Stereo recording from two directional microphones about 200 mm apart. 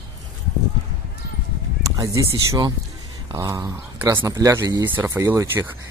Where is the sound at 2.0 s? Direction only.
20° right (ahead or behind).